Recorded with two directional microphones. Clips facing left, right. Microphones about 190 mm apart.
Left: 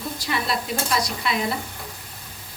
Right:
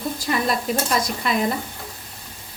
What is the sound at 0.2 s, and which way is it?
Frying, 45° right (ahead or behind).